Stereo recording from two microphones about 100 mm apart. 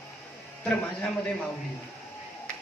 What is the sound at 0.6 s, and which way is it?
Speech, 10° left (ahead or behind).